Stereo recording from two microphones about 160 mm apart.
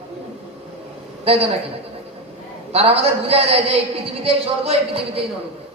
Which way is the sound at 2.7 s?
40° right (ahead or behind).